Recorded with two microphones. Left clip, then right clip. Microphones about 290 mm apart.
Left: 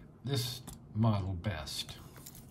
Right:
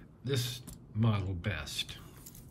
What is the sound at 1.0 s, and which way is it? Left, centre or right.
Speech, centre.